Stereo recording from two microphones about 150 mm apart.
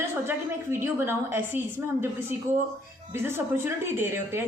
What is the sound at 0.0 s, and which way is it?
A woman's voice, 15° right (ahead or behind).